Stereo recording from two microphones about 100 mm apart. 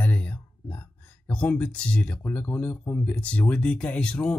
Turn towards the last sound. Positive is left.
turn(degrees=10)  # may be behind; listen again after turning